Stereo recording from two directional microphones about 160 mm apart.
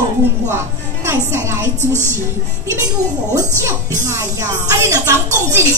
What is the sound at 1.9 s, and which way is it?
Speech, 15° left (ahead or behind).